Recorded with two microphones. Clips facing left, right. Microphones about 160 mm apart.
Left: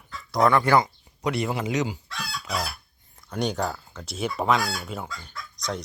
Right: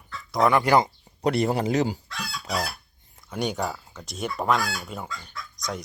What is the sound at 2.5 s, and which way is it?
Speech, centre (ahead or behind).